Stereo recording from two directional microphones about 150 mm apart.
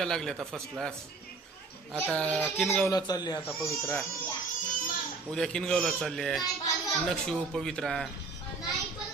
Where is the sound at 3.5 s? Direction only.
10° left (ahead or behind).